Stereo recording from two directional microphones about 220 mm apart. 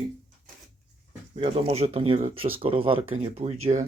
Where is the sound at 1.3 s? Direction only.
30° right (ahead or behind).